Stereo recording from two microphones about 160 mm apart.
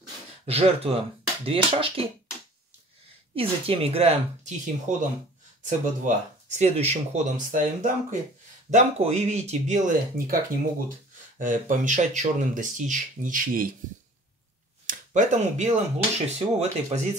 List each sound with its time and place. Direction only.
0.5 s speech: 40° right (ahead or behind)
3.3 s speech: 35° right (ahead or behind)
7.5 s speech: 55° right (ahead or behind)
8.6 s speech: 45° right (ahead or behind)
14.9 s speech: 50° right (ahead or behind)